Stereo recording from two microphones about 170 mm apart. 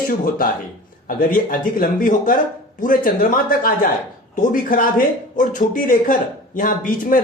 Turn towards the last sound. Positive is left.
turn(degrees=55)  # may be behind; listen again after turning